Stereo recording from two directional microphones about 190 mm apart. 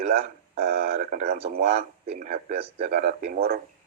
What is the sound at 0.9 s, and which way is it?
Crow, 40° right (ahead or behind).